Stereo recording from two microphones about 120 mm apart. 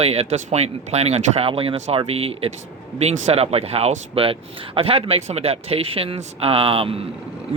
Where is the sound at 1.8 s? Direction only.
60° right (ahead or behind).